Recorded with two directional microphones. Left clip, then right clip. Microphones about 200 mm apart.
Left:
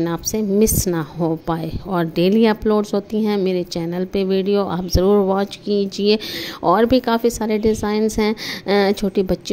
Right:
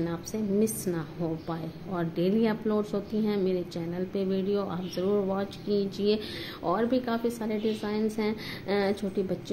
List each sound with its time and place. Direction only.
0.0 s a woman's voice: 40° left (ahead or behind)